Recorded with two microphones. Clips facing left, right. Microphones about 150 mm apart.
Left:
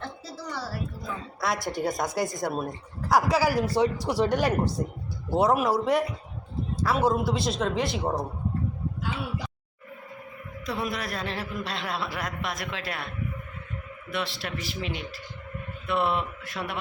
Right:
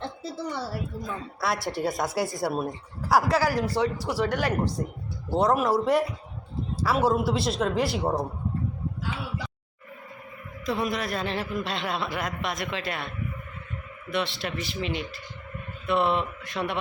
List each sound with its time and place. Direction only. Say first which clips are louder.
0.0 s a woman's voice: right 4 dB; 25° right (ahead or behind)
1.6 s a man's voice: even; 5° right (ahead or behind); by 4.9 s 15° left (ahead or behind)
5.3 s a man's voice: even; 5° left (ahead or behind)
10.7 s a man's voice: right 3 dB; centre (ahead or behind)
14.1 s a man's voice: right 3 dB; centre (ahead or behind)